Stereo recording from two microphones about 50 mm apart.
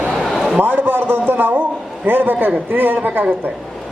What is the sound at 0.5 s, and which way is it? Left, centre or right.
A woman's voice, right.